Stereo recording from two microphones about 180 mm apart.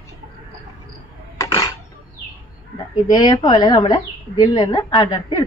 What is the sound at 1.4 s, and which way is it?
Dishes, 15° left (ahead or behind).